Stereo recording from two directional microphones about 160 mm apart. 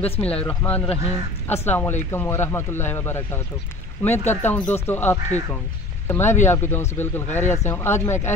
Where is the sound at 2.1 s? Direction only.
15° left (ahead or behind).